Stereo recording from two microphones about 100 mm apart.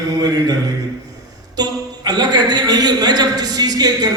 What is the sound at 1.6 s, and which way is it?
A man's voice, 40° right (ahead or behind).